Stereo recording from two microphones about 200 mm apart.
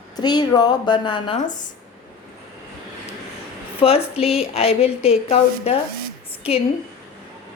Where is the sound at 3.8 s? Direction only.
30° left (ahead or behind).